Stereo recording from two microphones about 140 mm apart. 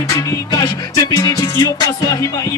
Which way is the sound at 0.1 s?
25° left (ahead or behind).